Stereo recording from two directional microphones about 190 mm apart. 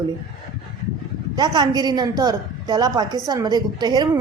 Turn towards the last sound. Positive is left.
turn(degrees=-20)  # may be behind; listen again after turning